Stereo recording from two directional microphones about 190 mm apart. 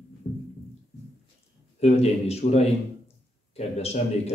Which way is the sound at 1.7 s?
35° left (ahead or behind).